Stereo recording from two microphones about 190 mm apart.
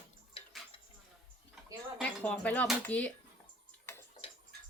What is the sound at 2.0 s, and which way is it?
Speech, 10° left (ahead or behind).